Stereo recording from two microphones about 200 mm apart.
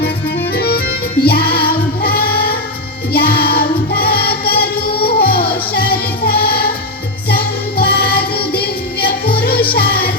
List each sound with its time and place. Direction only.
0.5 s accordion: 50° left (ahead or behind)
1.2 s music: 50° left (ahead or behind)